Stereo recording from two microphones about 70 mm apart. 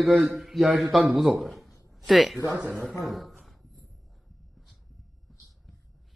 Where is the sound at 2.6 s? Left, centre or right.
Right.